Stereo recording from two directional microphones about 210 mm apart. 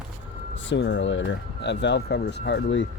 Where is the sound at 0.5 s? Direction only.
60° left (ahead or behind).